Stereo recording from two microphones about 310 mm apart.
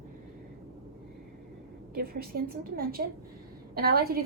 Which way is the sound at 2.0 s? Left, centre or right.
Right.